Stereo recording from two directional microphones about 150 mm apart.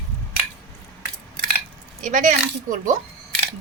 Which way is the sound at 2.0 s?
60° right (ahead or behind).